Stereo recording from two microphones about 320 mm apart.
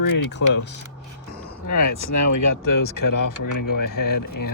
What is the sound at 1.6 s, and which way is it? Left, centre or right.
Speech, left.